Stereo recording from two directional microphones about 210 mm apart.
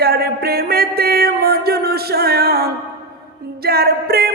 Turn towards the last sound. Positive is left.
turn(degrees=-45)  # may be behind; listen again after turning